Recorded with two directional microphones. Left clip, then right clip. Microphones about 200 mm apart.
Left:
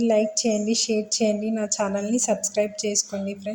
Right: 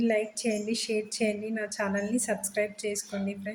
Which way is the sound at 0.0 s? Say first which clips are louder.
Left 7 dB; 20° left (ahead or behind).